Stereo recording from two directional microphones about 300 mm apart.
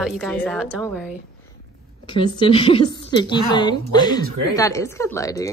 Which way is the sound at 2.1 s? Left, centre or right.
Centre.